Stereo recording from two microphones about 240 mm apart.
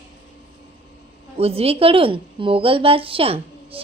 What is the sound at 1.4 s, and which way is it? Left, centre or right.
A woman's voice, right.